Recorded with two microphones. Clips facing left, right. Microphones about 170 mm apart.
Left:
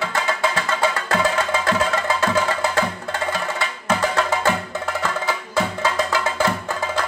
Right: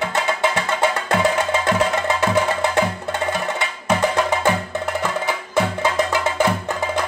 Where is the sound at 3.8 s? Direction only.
15° right (ahead or behind).